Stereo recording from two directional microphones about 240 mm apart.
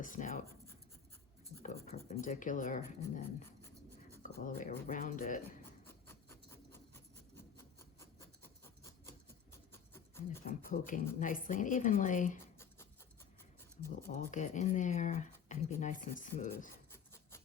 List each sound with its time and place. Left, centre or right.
0.0 s speech: left
1.6 s speech: left
4.2 s speech: left
5.9 s filing: centre
8.2 s filing: centre
9.7 s a sound: centre
10.4 s speech: left
14.1 s speech: left